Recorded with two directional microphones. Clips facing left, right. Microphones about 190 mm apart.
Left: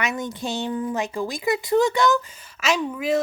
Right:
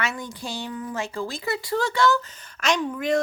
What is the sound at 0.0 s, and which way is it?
A woman's voice, 20° left (ahead or behind).